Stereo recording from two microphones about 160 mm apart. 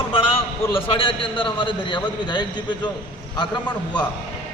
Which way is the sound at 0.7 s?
35° left (ahead or behind).